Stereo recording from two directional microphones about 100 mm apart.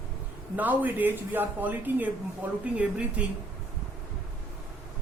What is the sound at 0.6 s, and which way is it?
Speech, 15° right (ahead or behind).